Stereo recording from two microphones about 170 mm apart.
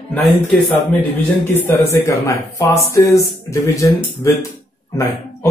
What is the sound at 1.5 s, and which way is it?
Speech, 15° left (ahead or behind).